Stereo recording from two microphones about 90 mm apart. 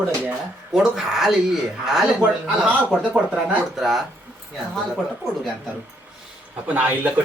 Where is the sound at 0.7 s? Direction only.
5° right (ahead or behind).